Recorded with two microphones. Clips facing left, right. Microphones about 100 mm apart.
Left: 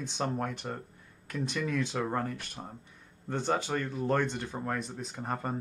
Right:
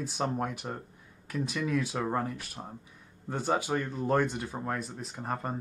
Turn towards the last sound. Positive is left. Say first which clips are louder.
# even
turn(degrees=0)  # may be behind; listen again after turning